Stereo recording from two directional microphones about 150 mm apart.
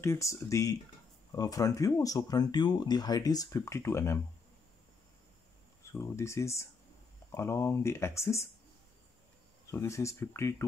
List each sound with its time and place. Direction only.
0.0 s speech: 20° left (ahead or behind)
5.9 s speech: 20° left (ahead or behind)
9.7 s speech: 20° left (ahead or behind)